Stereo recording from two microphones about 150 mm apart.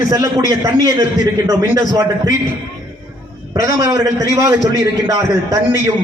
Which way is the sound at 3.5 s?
25° right (ahead or behind).